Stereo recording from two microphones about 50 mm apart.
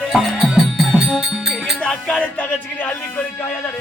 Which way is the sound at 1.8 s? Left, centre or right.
Centre.